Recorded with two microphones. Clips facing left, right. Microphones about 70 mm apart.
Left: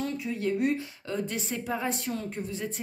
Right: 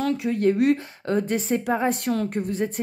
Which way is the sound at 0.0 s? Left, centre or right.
Right.